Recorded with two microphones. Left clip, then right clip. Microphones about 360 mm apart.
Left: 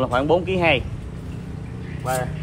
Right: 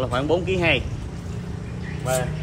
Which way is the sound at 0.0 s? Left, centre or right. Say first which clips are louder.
Left 3 dB; centre.